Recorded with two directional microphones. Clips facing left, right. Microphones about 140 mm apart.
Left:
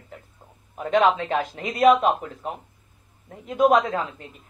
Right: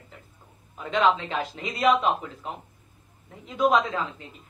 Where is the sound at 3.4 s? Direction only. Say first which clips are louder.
Left 4 dB; 50° left (ahead or behind).